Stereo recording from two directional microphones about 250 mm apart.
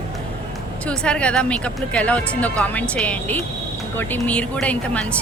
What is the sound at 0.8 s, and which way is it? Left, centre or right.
A woman's voice, centre.